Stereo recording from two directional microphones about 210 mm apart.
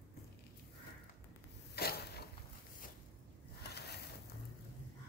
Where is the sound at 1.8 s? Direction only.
50° left (ahead or behind).